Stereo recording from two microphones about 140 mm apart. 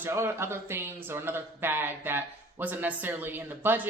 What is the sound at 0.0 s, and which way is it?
Speech, 20° right (ahead or behind).